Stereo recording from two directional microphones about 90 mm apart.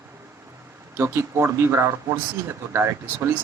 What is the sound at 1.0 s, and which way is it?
Speech, 30° right (ahead or behind).